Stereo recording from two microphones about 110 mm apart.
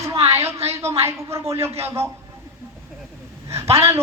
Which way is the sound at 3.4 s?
25° right (ahead or behind).